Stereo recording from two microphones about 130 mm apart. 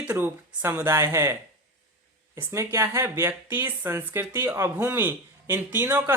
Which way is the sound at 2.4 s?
20° right (ahead or behind).